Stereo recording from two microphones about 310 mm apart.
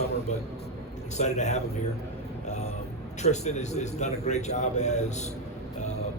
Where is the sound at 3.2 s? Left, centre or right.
Left.